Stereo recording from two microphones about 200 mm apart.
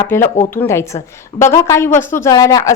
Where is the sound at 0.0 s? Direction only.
10° left (ahead or behind).